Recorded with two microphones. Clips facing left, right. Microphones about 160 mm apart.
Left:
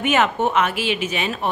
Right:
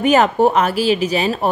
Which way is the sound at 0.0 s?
35° right (ahead or behind).